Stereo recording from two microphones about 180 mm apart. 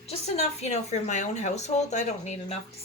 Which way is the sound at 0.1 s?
40° left (ahead or behind).